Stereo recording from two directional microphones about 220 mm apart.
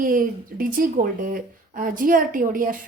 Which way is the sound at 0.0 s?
40° right (ahead or behind).